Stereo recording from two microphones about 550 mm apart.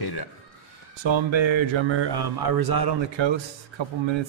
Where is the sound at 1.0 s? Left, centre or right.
Right.